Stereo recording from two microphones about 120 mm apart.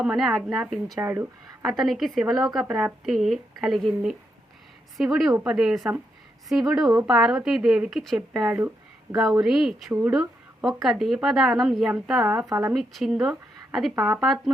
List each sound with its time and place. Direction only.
0.0 s a woman's voice: 5° right (ahead or behind)
1.0 s speech: 20° right (ahead or behind)
1.6 s a woman's voice: centre (ahead or behind)
8.4 s speech: 15° right (ahead or behind)
9.4 s a woman's voice: 5° right (ahead or behind)
12.5 s a woman's voice: 25° right (ahead or behind)
12.7 s a woman's voice: centre (ahead or behind)